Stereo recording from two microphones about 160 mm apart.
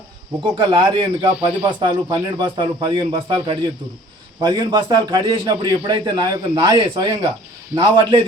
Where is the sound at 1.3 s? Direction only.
10° right (ahead or behind).